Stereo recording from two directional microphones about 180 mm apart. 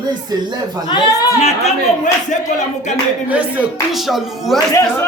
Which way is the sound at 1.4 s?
35° left (ahead or behind).